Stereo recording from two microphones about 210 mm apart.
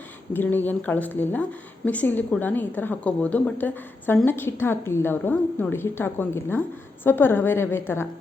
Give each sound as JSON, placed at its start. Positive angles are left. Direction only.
{"t": 0.3, "sound": "a woman's voice", "side_deg": 10}